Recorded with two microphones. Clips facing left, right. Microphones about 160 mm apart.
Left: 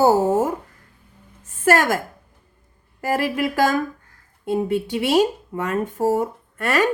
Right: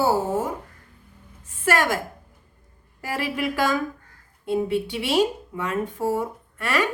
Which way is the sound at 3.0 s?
45° left (ahead or behind).